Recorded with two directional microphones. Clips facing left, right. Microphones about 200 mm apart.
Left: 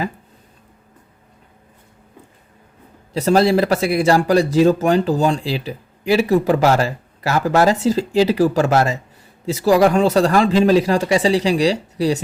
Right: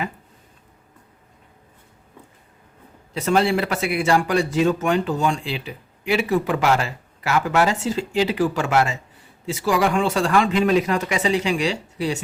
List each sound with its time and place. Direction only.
3.1 s speech: 35° left (ahead or behind)